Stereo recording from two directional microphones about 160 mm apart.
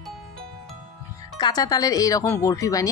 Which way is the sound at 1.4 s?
25° left (ahead or behind).